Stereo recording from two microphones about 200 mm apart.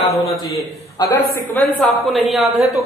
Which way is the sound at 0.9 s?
15° left (ahead or behind).